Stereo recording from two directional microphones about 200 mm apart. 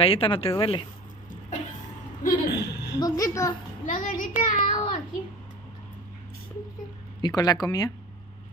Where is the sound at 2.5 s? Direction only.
55° left (ahead or behind).